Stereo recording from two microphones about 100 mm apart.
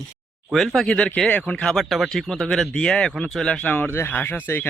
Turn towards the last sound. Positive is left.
turn(degrees=20)  # may be behind; listen again after turning